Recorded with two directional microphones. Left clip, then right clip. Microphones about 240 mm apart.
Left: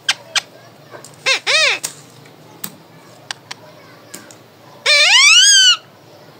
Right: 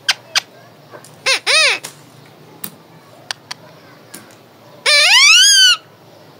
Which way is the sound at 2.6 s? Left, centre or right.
Centre.